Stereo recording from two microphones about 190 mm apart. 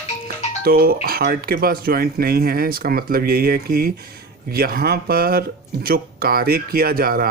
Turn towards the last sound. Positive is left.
turn(degrees=-50)  # may be behind; listen again after turning